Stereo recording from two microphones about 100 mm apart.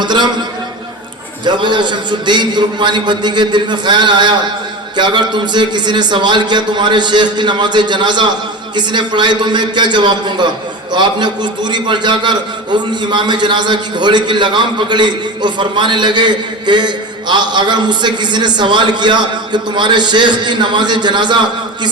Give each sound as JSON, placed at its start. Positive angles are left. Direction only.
{"t": 0.0, "sound": "a man's voice", "side_deg": -50}
{"t": 1.5, "sound": "a man's voice", "side_deg": -50}